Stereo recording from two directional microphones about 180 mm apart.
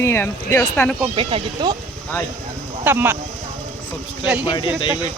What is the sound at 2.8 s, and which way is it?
Speech, 10° right (ahead or behind).